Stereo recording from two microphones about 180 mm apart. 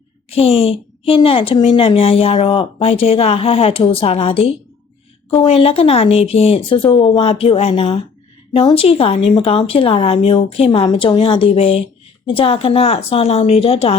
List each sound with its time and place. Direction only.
0.3 s a woman's voice: 35° left (ahead or behind)